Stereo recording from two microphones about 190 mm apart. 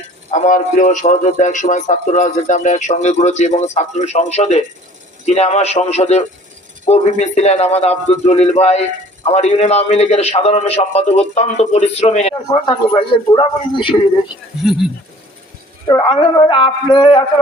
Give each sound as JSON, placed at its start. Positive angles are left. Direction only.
{"t": 0.3, "sound": "a man's voice", "side_deg": 40}
{"t": 12.5, "sound": "speech", "side_deg": 25}
{"t": 14.6, "sound": "speech", "side_deg": 0}
{"t": 15.9, "sound": "speech", "side_deg": 25}